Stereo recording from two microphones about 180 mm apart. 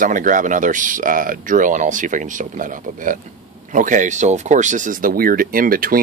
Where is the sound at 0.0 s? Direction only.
45° right (ahead or behind).